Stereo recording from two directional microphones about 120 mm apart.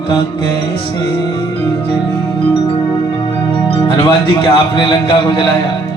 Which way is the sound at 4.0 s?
45° left (ahead or behind).